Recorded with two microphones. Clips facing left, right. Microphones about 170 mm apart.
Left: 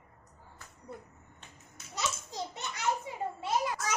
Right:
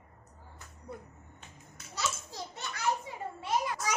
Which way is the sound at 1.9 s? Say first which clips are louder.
Left 1 dB; 20° left (ahead or behind).